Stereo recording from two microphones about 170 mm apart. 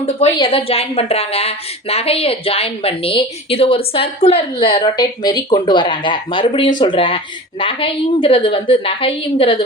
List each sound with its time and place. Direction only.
0.0 s a woman's voice: 35° left (ahead or behind)